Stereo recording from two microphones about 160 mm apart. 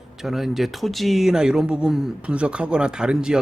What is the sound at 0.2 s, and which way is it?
Speech, centre (ahead or behind).